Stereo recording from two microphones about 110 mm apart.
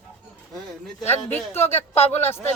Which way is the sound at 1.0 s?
20° left (ahead or behind).